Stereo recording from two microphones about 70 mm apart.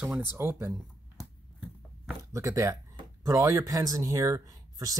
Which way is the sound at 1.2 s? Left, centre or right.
Centre.